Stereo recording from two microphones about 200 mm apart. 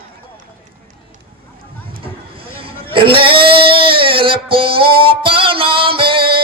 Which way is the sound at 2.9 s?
25° right (ahead or behind).